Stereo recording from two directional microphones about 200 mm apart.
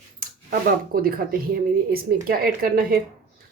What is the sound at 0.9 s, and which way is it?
A woman's voice, 50° right (ahead or behind).